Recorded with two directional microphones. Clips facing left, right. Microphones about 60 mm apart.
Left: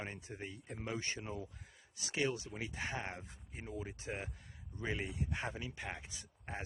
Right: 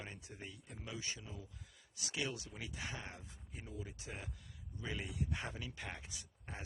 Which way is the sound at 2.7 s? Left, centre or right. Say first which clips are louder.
Left 6 dB; left.